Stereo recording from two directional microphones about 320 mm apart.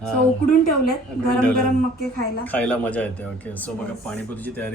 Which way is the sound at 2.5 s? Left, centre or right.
Centre.